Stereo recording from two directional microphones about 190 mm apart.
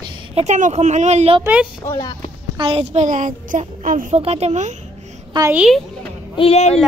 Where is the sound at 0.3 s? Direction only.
35° right (ahead or behind).